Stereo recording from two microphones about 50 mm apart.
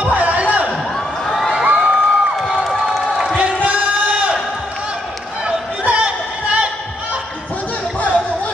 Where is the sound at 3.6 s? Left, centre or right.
Right.